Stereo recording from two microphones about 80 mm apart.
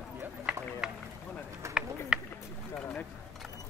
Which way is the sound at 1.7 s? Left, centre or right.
Centre.